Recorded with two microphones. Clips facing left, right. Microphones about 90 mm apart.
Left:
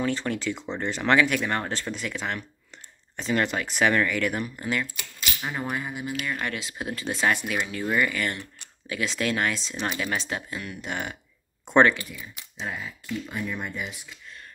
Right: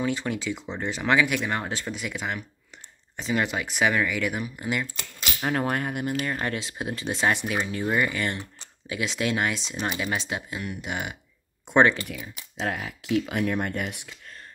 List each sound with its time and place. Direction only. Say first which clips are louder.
0.0 s speech: left 1 dB; 10° right (ahead or behind)
5.5 s speech: right 6 dB; 60° right (ahead or behind)
6.2 s speech: right 2 dB; 35° right (ahead or behind); by 11.1 s 15° right (ahead or behind)
11.6 s a sound: left 1 dB; 10° right (ahead or behind)
12.6 s speech: right 4 dB; 70° right (ahead or behind)